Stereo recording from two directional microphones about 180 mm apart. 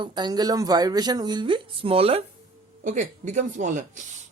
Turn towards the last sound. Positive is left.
turn(degrees=-45)  # may be behind; listen again after turning